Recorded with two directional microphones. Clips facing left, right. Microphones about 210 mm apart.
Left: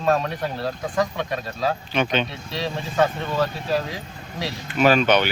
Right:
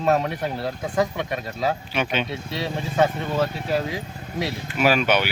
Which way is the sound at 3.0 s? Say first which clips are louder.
Even; 20° right (ahead or behind).